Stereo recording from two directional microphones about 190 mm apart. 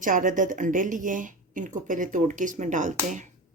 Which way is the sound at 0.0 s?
45° right (ahead or behind).